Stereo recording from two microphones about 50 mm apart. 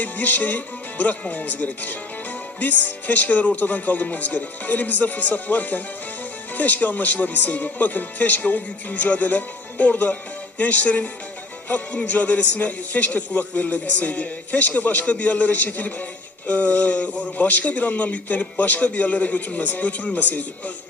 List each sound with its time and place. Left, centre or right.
0.0 s a man's voice: left